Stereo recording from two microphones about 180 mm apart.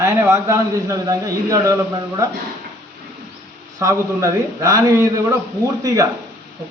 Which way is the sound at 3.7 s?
20° right (ahead or behind).